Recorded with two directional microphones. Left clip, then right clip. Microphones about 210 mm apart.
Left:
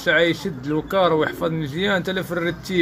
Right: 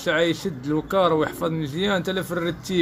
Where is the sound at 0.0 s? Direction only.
10° right (ahead or behind).